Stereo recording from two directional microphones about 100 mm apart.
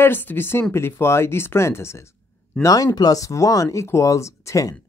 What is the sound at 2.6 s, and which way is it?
Speech, 40° left (ahead or behind).